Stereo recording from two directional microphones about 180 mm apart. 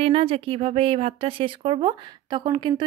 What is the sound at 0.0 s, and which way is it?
Speech, 30° right (ahead or behind).